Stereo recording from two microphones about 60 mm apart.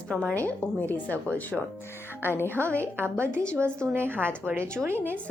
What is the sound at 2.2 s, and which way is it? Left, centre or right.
Speech, left.